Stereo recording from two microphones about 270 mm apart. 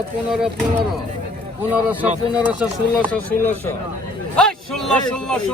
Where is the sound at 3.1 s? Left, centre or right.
Centre.